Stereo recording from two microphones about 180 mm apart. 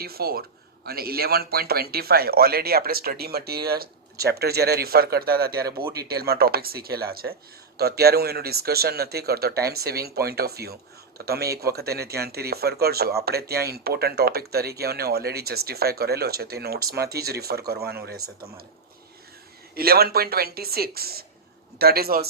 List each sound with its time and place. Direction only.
0.0 s speech: 60° right (ahead or behind)
19.7 s speech: 60° right (ahead or behind)